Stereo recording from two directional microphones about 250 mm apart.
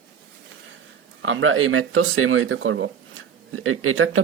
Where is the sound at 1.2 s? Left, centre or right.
Right.